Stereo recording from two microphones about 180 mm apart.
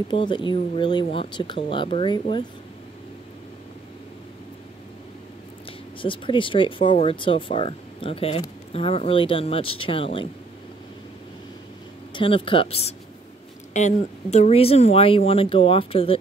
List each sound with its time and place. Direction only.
0.1 s speech: 25° left (ahead or behind)
5.7 s speech: 30° left (ahead or behind)
12.1 s speech: 30° left (ahead or behind)